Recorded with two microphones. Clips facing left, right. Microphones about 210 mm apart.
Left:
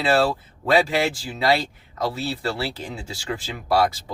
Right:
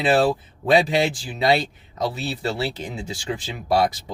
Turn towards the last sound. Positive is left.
turn(degrees=-20)  # may be behind; listen again after turning